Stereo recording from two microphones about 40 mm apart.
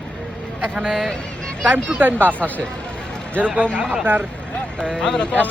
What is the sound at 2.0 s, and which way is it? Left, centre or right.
Speech, right.